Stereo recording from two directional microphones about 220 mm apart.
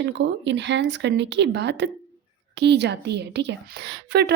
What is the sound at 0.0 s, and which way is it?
A woman's voice, 55° right (ahead or behind).